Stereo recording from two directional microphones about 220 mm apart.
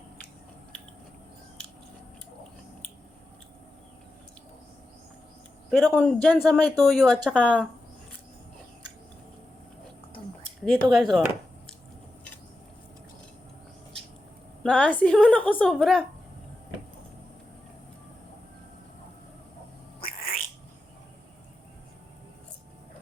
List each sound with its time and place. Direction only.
5.7 s a woman's voice: 5° left (ahead or behind)
10.9 s a woman's voice: centre (ahead or behind)
14.6 s a woman's voice: 5° left (ahead or behind)
20.0 s cat: 40° left (ahead or behind)